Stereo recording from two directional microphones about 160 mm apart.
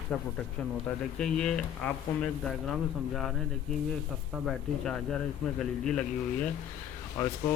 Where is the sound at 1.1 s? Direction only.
5° left (ahead or behind).